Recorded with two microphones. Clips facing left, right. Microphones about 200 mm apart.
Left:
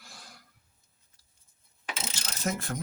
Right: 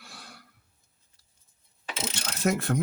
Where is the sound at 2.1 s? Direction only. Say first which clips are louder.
Right 7 dB; 65° right (ahead or behind).